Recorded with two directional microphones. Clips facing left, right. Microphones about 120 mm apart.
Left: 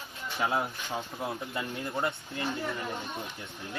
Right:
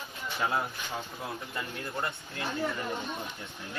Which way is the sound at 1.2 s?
20° left (ahead or behind).